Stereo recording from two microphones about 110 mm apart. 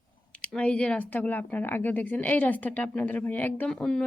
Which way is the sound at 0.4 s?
10° left (ahead or behind).